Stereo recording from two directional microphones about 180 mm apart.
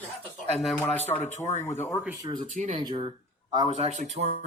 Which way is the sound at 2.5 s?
45° right (ahead or behind).